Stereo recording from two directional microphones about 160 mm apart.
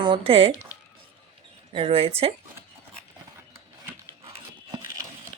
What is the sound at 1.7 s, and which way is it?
Speech, 35° right (ahead or behind).